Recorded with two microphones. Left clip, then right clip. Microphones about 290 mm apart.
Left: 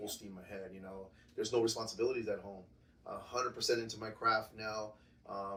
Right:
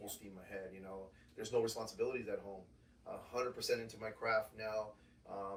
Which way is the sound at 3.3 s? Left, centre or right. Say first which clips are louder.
Left 3 dB; centre.